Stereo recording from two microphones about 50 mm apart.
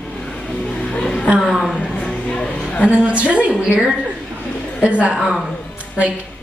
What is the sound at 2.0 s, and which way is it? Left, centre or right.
Music, left.